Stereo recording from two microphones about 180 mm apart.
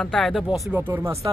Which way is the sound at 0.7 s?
15° right (ahead or behind).